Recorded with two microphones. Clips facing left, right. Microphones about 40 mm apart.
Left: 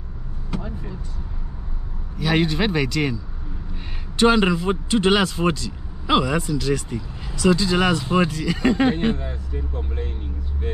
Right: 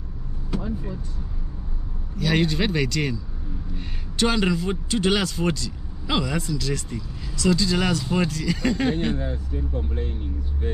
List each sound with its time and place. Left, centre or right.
0.5 s vehicle: centre
2.1 s a man's voice: centre; by 9.3 s left